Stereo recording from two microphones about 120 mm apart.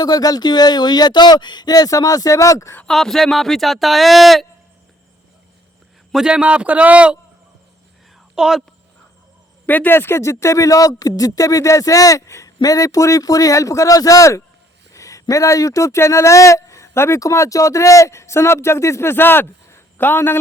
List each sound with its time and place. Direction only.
0.0 s speech: 35° left (ahead or behind)
2.8 s speech: 5° left (ahead or behind)
6.1 s a man's voice: 5° right (ahead or behind)
8.4 s speech: 5° right (ahead or behind)
9.6 s speech: 15° left (ahead or behind)